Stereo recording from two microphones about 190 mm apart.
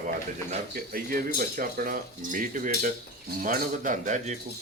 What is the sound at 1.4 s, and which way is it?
Speech, 50° right (ahead or behind).